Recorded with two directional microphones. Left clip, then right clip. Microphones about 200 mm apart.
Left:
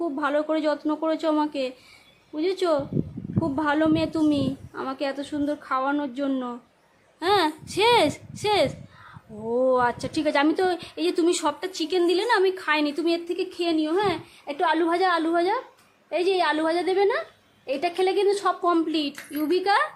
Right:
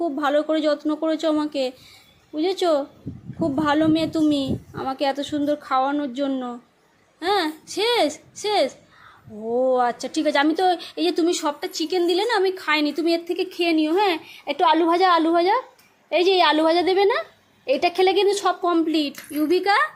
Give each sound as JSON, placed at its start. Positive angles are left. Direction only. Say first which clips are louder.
{"t": 0.0, "sound": "speech", "louder": "right 4 dB", "side_deg": -5}